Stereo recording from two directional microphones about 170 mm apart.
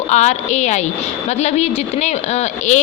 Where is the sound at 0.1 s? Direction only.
40° left (ahead or behind).